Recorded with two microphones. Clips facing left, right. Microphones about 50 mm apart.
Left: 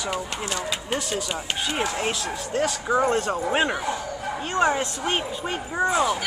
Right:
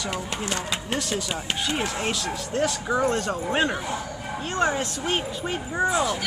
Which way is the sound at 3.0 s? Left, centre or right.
Left.